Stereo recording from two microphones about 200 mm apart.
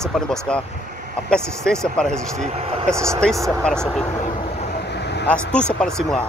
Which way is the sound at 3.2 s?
5° left (ahead or behind).